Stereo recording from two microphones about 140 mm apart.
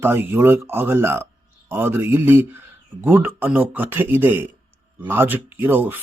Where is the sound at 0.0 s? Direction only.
15° right (ahead or behind).